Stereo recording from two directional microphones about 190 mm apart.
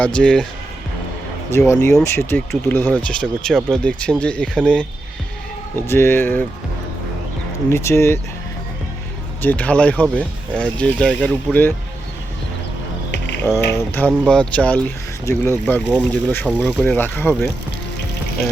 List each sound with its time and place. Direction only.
0.0 s speech: 5° left (ahead or behind)
1.5 s speech: 15° left (ahead or behind)
7.7 s speech: 15° left (ahead or behind)
9.4 s speech: 10° left (ahead or behind)
13.1 s ratchet: 65° left (ahead or behind)
13.4 s speech: 10° left (ahead or behind)